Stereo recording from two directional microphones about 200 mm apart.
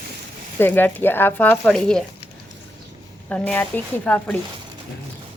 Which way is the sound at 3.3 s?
10° left (ahead or behind).